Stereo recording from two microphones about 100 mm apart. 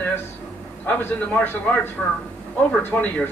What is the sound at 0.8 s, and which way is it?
Speech, 20° left (ahead or behind).